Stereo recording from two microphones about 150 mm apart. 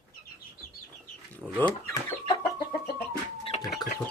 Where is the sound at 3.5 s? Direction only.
45° left (ahead or behind).